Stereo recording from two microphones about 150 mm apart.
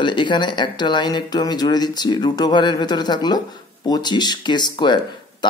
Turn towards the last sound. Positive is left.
turn(degrees=30)  # may be behind; listen again after turning